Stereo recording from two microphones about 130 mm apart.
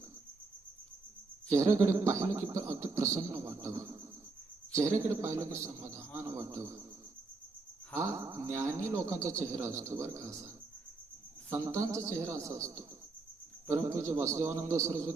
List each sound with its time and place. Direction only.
1.5 s a man's voice: 25° right (ahead or behind)
5.0 s a man's voice: 25° right (ahead or behind)
7.9 s a man's voice: 25° right (ahead or behind)
11.9 s a man's voice: 25° right (ahead or behind)